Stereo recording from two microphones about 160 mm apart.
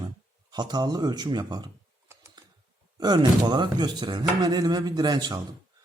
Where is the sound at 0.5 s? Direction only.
25° right (ahead or behind).